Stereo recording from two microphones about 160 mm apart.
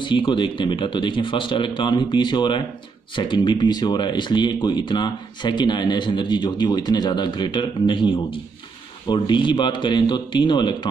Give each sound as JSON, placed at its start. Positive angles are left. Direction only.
{"t": 0.0, "sound": "speech", "side_deg": 30}